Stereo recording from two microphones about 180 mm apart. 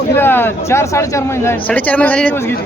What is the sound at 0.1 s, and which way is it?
A man's voice, 10° left (ahead or behind).